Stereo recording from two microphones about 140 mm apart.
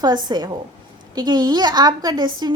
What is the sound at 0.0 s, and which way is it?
A woman's voice, 30° right (ahead or behind).